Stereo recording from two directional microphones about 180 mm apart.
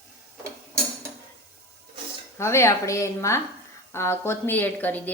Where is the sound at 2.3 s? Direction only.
15° left (ahead or behind).